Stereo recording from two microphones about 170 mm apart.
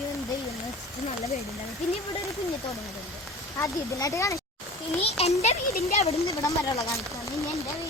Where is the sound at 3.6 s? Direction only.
20° left (ahead or behind).